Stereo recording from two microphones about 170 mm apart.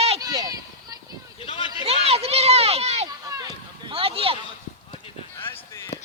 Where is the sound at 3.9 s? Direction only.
35° right (ahead or behind).